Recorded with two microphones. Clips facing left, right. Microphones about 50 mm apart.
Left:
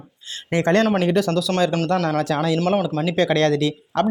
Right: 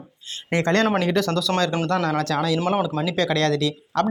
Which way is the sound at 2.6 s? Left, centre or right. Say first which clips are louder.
Left 3 dB; centre.